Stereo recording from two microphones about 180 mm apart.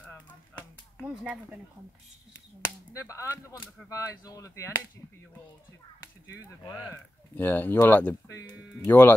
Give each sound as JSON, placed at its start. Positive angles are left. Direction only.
{"t": 0.0, "sound": "a sound", "side_deg": 10}
{"t": 1.0, "sound": "speech", "side_deg": -10}
{"t": 2.6, "sound": "speech", "side_deg": 15}
{"t": 6.2, "sound": "speech", "side_deg": 15}